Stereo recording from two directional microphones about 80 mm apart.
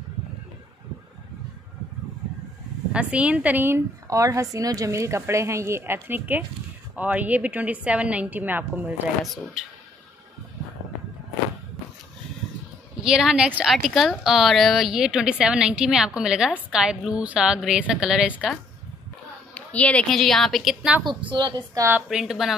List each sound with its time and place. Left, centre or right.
2.9 s speech: centre
4.1 s a woman's voice: right
9.2 s a woman's voice: centre
13.0 s speech: centre
19.5 s a sound: centre
20.1 s a woman's voice: centre
21.0 s a woman's voice: right
22.1 s a woman's voice: centre